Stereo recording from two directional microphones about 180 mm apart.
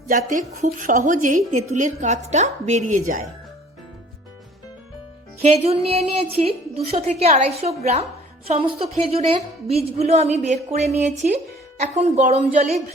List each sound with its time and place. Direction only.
0.1 s a woman's voice: 45° right (ahead or behind)
5.4 s a woman's voice: 35° right (ahead or behind)